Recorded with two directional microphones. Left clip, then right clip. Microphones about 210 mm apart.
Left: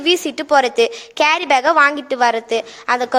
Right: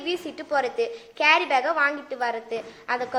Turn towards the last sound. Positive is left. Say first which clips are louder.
# left 9 dB
turn(degrees=50)  # may be behind; listen again after turning